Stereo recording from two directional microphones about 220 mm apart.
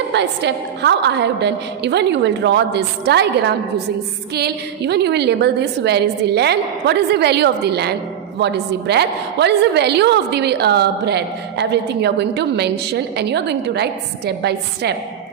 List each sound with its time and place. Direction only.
0.1 s a woman's voice: 50° right (ahead or behind)